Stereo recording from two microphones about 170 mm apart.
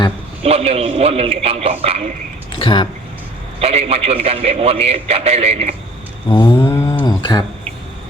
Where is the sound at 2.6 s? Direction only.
30° left (ahead or behind).